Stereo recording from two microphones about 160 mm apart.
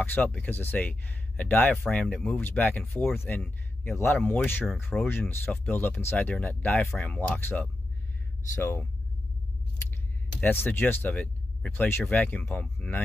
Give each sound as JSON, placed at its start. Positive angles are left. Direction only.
{"t": 0.0, "sound": "a man's voice", "side_deg": 10}
{"t": 10.4, "sound": "speech", "side_deg": 15}